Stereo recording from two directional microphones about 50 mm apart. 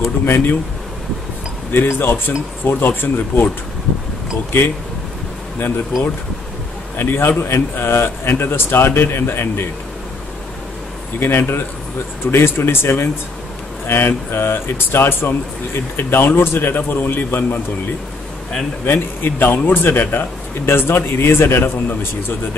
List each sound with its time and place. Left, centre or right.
0.2 s a man's voice: left
1.7 s a man's voice: left
4.5 s a man's voice: left
7.0 s a man's voice: left
11.1 s a man's voice: left
18.9 s a man's voice: left